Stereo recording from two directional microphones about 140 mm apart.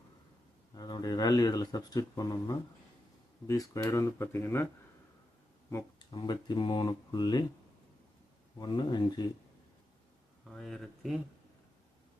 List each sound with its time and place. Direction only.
0.8 s speech: 30° left (ahead or behind)
6.0 s speech: 30° left (ahead or behind)
8.5 s speech: 30° left (ahead or behind)
10.5 s speech: centre (ahead or behind)